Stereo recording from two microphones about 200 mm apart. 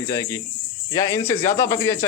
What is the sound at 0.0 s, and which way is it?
Speech, 15° left (ahead or behind).